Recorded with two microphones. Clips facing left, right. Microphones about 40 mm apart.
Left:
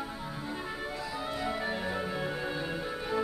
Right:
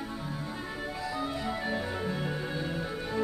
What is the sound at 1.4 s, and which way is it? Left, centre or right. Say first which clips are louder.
Music: even; centre.